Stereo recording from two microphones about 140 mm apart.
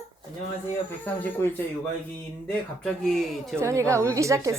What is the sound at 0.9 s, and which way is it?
Speech, 15° left (ahead or behind).